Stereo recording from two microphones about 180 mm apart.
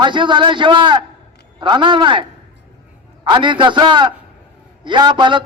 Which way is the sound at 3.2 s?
25° right (ahead or behind).